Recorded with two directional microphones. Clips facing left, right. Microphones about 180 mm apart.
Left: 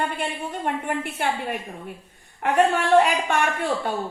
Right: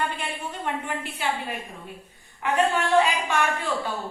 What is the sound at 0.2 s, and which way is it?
A woman's voice, 55° left (ahead or behind).